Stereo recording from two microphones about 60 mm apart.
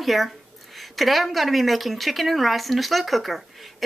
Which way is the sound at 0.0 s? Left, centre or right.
Centre.